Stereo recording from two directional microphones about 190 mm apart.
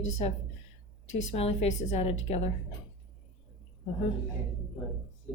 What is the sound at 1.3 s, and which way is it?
A woman's voice, 30° left (ahead or behind).